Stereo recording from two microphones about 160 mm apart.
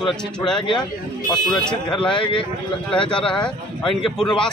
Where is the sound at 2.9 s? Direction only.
5° left (ahead or behind).